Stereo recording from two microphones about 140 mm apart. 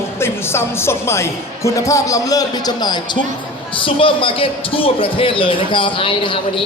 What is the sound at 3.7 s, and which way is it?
A man's voice, 40° left (ahead or behind).